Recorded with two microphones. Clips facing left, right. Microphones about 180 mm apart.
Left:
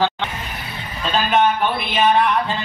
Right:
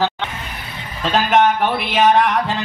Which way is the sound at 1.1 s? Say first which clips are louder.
Right 2 dB; 75° right (ahead or behind).